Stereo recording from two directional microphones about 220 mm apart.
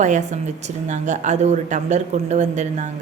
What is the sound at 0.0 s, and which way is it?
Speech, 35° right (ahead or behind).